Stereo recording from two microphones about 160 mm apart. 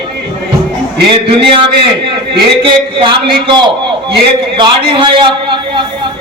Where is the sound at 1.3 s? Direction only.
30° right (ahead or behind).